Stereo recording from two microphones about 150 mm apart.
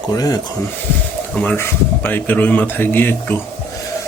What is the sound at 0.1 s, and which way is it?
Speech, 25° left (ahead or behind).